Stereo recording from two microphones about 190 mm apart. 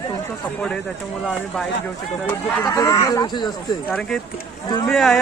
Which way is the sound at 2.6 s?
15° left (ahead or behind).